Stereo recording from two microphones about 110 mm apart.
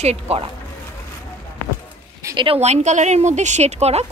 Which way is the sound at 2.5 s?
90° right.